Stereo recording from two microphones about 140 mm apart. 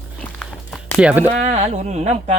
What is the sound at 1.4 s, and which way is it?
Speech, 50° right (ahead or behind).